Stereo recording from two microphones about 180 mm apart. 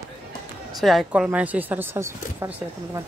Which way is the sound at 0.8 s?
Centre (ahead or behind).